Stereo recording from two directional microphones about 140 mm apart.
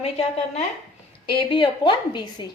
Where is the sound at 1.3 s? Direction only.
35° left (ahead or behind).